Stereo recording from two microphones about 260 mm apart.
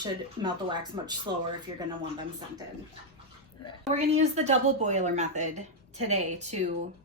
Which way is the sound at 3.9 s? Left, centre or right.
Right.